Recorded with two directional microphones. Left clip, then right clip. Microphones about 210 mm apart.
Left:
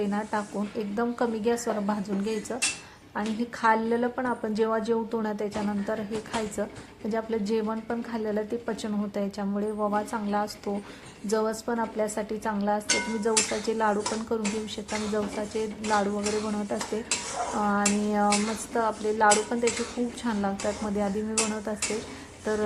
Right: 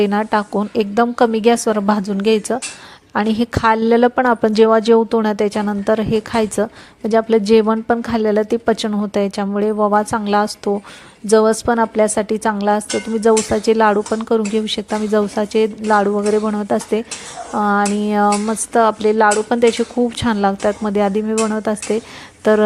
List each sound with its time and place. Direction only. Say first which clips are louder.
0.0 s speech: right 13 dB; 40° right (ahead or behind)